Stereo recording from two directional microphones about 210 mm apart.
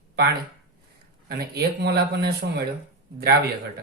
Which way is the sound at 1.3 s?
50° right (ahead or behind).